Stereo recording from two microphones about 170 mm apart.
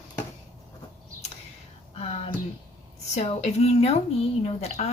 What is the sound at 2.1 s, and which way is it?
A woman's voice, 35° left (ahead or behind).